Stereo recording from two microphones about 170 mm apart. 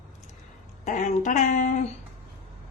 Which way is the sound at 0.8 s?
45° left (ahead or behind).